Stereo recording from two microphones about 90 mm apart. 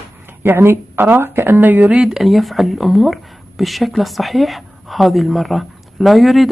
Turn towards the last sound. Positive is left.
turn(degrees=0)  # may be behind; listen again after turning